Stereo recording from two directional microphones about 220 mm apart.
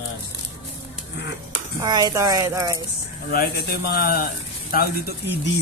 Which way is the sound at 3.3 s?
45° left (ahead or behind).